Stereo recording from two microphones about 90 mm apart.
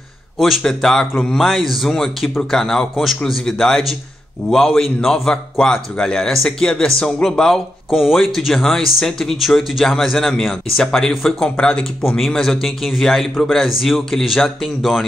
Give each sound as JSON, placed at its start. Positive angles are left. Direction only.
{"t": 0.4, "sound": "a man's voice", "side_deg": 0}